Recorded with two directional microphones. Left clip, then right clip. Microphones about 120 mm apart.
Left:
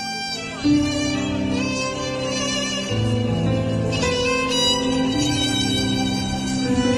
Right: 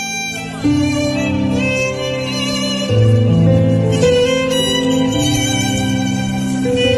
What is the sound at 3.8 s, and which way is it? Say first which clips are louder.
Music: right 9 dB; 30° right (ahead or behind).